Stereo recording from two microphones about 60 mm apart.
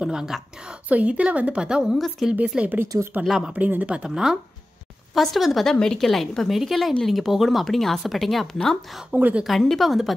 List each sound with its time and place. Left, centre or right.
0.0 s a woman's voice: centre
0.8 s a woman's voice: right
2.0 s a woman's voice: centre
2.3 s a woman's voice: centre
2.9 s speech: right
3.3 s a woman's voice: centre
3.5 s a woman's voice: right
4.1 s a woman's voice: centre
9.1 s a woman's voice: right
9.4 s a woman's voice: centre